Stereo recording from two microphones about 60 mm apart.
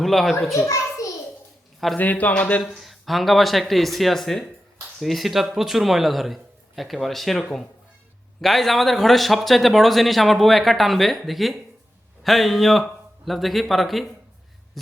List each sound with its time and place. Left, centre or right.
0.0 s speech: centre
0.7 s a sound: left
2.0 s a man's voice: left
2.7 s speech: centre